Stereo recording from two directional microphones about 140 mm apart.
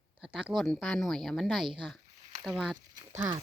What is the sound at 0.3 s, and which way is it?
Speech, centre (ahead or behind).